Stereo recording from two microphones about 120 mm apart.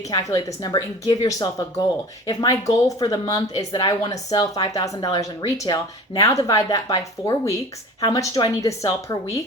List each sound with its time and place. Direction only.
0.1 s a woman's voice: 35° left (ahead or behind)